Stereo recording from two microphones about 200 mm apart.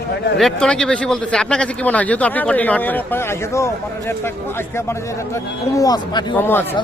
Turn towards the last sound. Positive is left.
turn(degrees=10)  # may be behind; listen again after turning